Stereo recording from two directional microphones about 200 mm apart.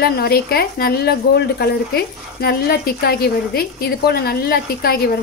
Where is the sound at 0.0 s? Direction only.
50° left (ahead or behind).